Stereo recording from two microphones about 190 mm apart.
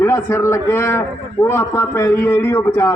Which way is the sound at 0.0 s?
15° left (ahead or behind).